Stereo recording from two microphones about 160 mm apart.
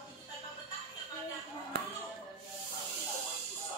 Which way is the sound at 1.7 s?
70° right (ahead or behind).